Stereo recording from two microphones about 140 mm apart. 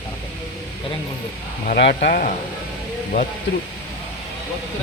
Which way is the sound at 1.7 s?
85° left.